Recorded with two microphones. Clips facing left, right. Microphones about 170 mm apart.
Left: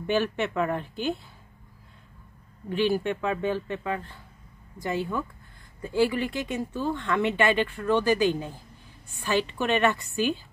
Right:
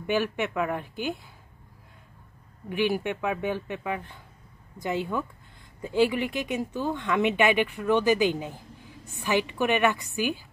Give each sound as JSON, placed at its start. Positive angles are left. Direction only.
{"t": 0.0, "sound": "speech", "side_deg": -15}
{"t": 2.7, "sound": "speech", "side_deg": -15}